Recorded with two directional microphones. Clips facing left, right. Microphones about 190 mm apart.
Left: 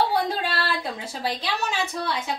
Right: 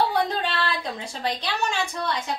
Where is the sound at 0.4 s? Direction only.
10° left (ahead or behind).